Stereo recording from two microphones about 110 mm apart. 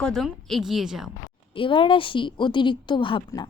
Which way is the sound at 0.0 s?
Centre (ahead or behind).